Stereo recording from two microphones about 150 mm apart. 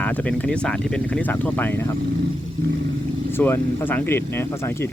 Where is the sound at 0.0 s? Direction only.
10° left (ahead or behind).